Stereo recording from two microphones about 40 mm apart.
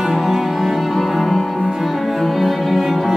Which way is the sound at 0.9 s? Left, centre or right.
Centre.